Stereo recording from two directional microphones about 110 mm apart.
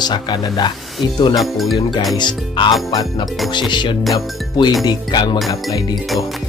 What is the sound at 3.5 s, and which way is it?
Speech, 45° left (ahead or behind).